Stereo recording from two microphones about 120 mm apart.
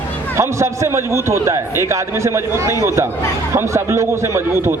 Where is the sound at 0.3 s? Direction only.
25° right (ahead or behind).